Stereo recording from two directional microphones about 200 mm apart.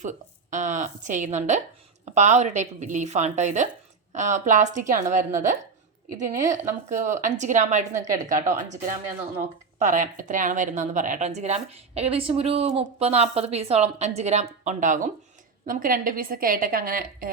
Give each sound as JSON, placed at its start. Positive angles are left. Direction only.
{"t": 0.0, "sound": "a woman's voice", "side_deg": -40}
{"t": 6.5, "sound": "a woman's voice", "side_deg": -40}